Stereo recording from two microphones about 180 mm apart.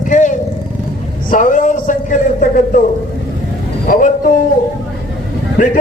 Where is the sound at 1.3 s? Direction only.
45° left (ahead or behind).